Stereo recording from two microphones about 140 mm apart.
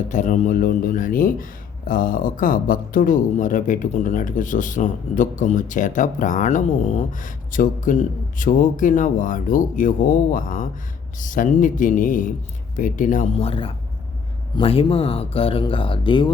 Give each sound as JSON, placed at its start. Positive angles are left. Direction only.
{"t": 0.1, "sound": "speech", "side_deg": 60}
{"t": 13.4, "sound": "speech", "side_deg": 40}